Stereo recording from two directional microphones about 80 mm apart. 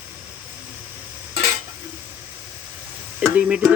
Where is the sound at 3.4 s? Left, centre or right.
Centre.